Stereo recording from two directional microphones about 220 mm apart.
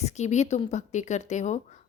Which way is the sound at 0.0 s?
30° left (ahead or behind).